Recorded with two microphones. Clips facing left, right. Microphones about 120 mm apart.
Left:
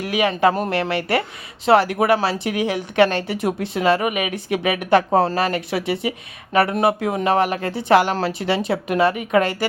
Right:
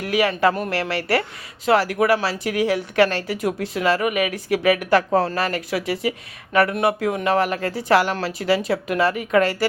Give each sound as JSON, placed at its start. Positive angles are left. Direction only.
{"t": 0.0, "sound": "speech", "side_deg": 20}